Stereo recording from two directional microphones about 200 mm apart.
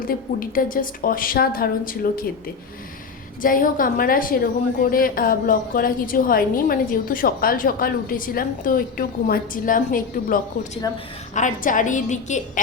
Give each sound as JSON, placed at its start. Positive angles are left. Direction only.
{"t": 0.3, "sound": "a woman's voice", "side_deg": 45}
{"t": 3.4, "sound": "a woman's voice", "side_deg": 45}